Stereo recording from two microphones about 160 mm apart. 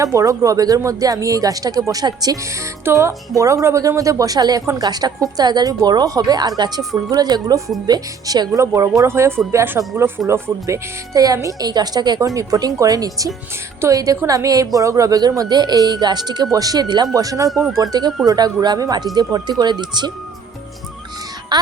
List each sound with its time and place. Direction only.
0.0 s a woman's voice: 20° right (ahead or behind)
21.5 s speech: 25° right (ahead or behind)